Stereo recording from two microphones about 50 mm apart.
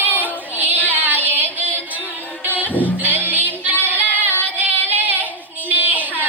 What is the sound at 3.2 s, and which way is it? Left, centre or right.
Music, right.